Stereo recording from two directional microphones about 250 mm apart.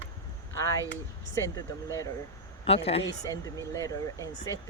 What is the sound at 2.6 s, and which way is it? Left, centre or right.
Speech, left.